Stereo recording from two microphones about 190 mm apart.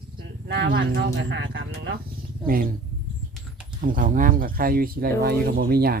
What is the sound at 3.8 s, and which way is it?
Speech, 45° right (ahead or behind).